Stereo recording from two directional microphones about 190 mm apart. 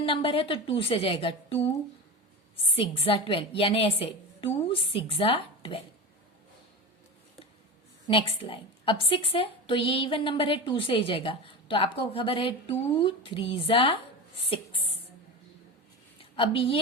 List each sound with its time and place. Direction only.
0.0 s a woman's voice: 30° left (ahead or behind)
2.7 s a woman's voice: 30° left (ahead or behind)
8.0 s a woman's voice: 25° left (ahead or behind)
16.3 s a woman's voice: 25° left (ahead or behind)